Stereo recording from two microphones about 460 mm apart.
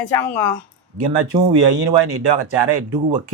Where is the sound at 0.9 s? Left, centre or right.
Right.